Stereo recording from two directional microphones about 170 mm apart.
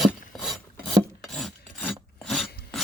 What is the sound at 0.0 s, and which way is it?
Filing, centre (ahead or behind).